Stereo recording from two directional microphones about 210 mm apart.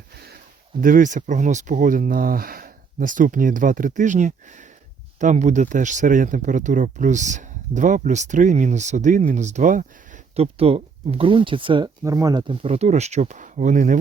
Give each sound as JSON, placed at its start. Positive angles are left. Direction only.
{"t": 0.8, "sound": "speech", "side_deg": -40}